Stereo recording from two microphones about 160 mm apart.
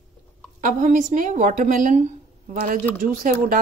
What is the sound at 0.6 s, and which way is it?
A woman's voice, 55° right (ahead or behind).